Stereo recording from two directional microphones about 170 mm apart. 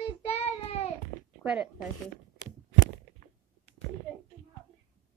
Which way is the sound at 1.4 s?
5° right (ahead or behind).